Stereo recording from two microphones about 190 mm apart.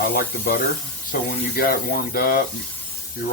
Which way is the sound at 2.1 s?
50° left (ahead or behind).